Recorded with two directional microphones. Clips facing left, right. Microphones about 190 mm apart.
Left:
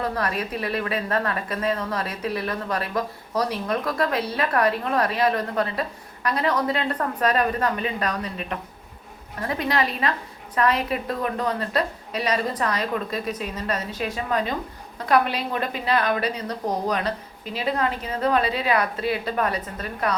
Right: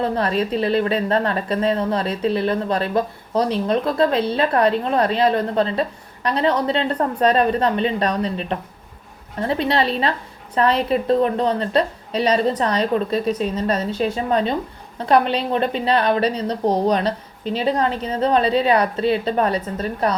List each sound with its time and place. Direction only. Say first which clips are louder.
0.0 s a woman's voice: right 6 dB; 25° right (ahead or behind)